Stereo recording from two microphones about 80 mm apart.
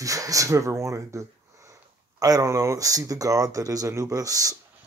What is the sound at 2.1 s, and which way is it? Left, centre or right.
Speech, right.